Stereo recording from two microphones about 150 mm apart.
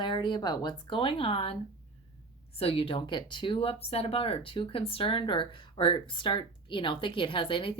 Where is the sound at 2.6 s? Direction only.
40° left (ahead or behind).